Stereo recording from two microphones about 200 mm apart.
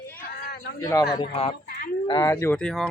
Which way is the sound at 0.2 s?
45° left (ahead or behind).